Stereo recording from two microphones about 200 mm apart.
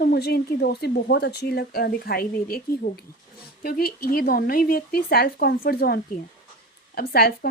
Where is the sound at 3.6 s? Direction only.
50° left (ahead or behind).